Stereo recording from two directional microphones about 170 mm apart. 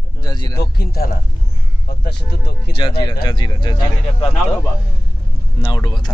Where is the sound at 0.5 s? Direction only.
65° left (ahead or behind).